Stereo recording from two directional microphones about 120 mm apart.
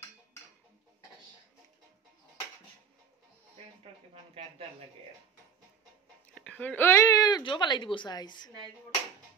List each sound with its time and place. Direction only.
4.1 s speech: 50° right (ahead or behind)
6.3 s a woman's voice: 10° left (ahead or behind); by 8.5 s 35° left (ahead or behind)